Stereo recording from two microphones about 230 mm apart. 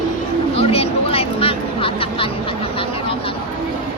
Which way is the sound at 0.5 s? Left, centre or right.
Left.